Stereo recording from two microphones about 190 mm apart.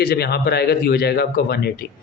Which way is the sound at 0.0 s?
55° left (ahead or behind).